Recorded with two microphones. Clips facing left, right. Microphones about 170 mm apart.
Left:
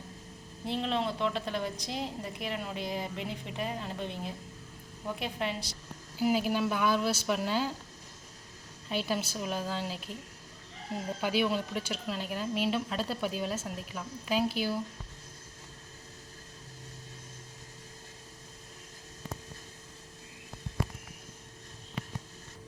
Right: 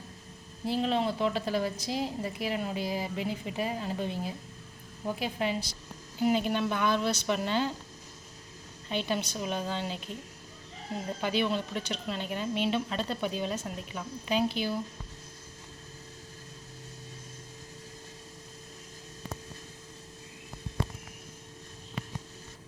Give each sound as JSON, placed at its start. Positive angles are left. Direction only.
{"t": 0.6, "sound": "a woman's voice", "side_deg": -5}
{"t": 8.9, "sound": "a woman's voice", "side_deg": 5}
{"t": 11.2, "sound": "a woman's voice", "side_deg": 5}
{"t": 20.8, "sound": "a sound", "side_deg": -25}